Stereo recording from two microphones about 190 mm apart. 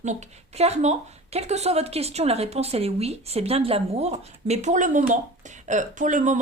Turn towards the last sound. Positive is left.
turn(degrees=-40)  # may be behind; listen again after turning